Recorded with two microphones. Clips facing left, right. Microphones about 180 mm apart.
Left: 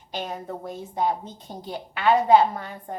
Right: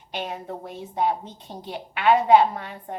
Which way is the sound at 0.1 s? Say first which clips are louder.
Even; 40° left (ahead or behind).